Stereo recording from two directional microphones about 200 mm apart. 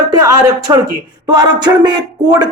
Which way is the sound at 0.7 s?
20° right (ahead or behind).